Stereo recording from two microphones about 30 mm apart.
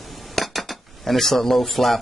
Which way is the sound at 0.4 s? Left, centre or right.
Centre.